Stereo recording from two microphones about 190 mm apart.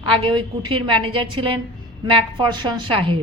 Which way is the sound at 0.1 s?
25° right (ahead or behind).